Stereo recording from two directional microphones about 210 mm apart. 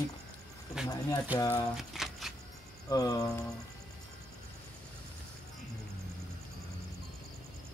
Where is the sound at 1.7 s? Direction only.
Centre (ahead or behind).